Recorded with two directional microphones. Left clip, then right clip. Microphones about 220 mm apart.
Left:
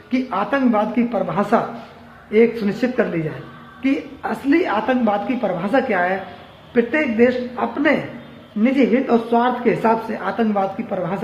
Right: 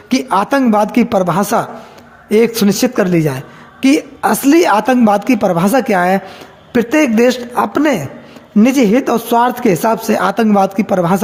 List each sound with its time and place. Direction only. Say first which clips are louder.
0.1 s speech: right 7 dB; 50° right (ahead or behind)